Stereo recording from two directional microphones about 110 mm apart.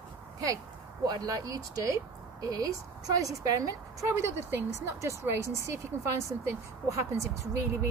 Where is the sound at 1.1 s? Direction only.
35° right (ahead or behind).